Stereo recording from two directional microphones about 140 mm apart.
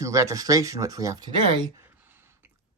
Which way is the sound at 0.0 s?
20° right (ahead or behind).